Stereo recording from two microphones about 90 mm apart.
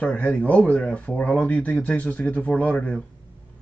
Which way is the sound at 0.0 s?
15° left (ahead or behind).